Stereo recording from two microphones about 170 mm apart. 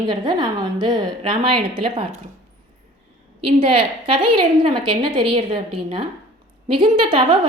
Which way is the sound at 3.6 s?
30° right (ahead or behind).